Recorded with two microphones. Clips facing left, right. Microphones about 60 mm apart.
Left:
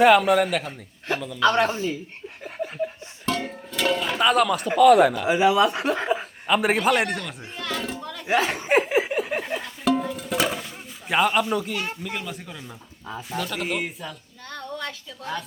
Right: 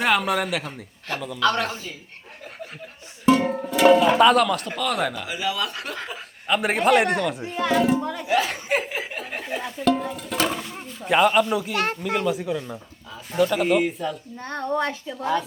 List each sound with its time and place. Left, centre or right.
0.0 s speech: centre
1.4 s speech: left
3.2 s music: centre
4.2 s speech: centre
5.2 s speech: left
6.5 s speech: centre
7.5 s a sound: centre
8.0 s music: centre
8.3 s speech: left
8.8 s a sound: centre
9.8 s music: centre
11.7 s speech: right
12.0 s speech: centre
14.4 s speech: right